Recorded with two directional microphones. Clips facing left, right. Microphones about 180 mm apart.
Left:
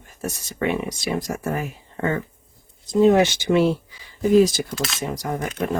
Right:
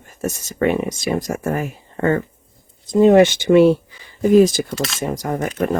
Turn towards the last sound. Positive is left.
turn(degrees=-45)  # may be behind; listen again after turning